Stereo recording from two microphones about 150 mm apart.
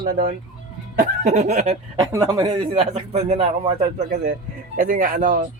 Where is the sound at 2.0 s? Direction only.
25° right (ahead or behind).